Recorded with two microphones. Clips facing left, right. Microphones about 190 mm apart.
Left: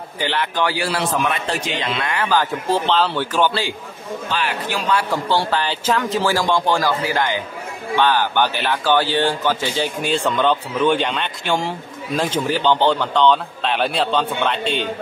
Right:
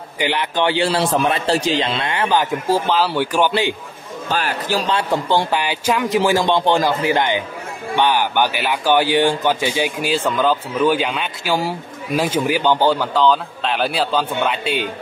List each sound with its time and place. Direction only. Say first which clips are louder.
0.2 s speech: right 2 dB; 15° right (ahead or behind)
2.7 s a man's voice: right 1 dB; 10° right (ahead or behind)
4.3 s speech: right 4 dB; 40° right (ahead or behind)
4.9 s a man's voice: even; 20° right (ahead or behind)